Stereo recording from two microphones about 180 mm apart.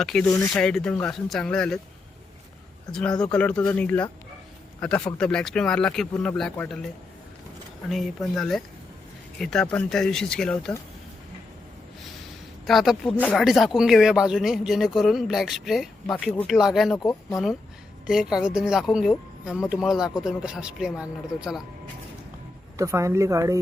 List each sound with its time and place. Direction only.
0.0 s speech: 5° left (ahead or behind)
2.9 s speech: 5° left (ahead or behind)
7.9 s speech: centre (ahead or behind)
12.6 s speech: centre (ahead or behind)
17.0 s speech: 20° left (ahead or behind)
18.0 s speech: 5° right (ahead or behind)
22.8 s speech: 15° right (ahead or behind)